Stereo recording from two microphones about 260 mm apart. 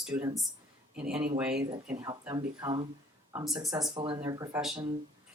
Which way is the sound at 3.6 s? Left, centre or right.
Centre.